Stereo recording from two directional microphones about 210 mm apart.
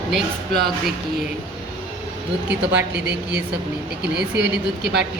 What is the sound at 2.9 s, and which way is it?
Speech, 55° right (ahead or behind).